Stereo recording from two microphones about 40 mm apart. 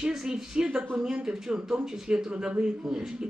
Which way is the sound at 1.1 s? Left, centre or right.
Centre.